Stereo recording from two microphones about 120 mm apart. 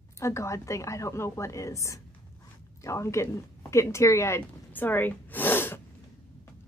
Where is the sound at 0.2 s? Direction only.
25° left (ahead or behind).